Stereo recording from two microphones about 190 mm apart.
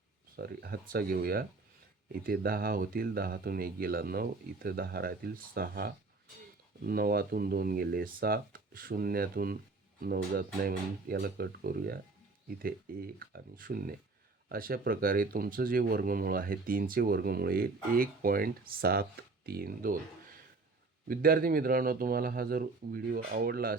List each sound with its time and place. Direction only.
0.3 s speech: 55° right (ahead or behind)
21.1 s speech: 50° right (ahead or behind)